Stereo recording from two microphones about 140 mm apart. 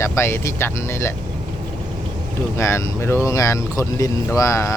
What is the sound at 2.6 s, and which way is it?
Speech, 20° left (ahead or behind).